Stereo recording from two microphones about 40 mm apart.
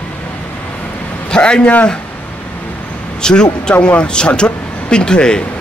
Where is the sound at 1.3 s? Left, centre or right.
Left.